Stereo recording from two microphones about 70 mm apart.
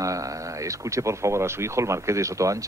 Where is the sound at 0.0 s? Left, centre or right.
Right.